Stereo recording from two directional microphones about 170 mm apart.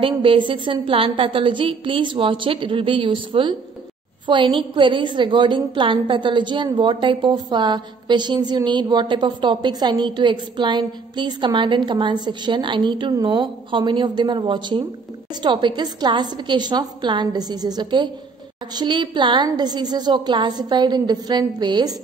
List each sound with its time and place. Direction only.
0.0 s a woman's voice: 30° right (ahead or behind)